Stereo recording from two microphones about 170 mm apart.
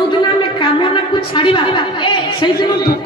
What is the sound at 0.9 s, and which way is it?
A woman's voice, 30° left (ahead or behind).